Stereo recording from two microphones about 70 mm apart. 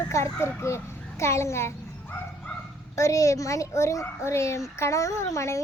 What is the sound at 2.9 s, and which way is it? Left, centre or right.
A child's voice, left.